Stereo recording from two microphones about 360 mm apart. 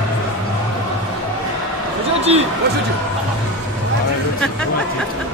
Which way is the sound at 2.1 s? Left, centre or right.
Centre.